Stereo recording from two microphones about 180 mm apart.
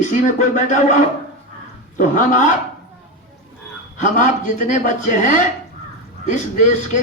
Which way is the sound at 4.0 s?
45° left (ahead or behind).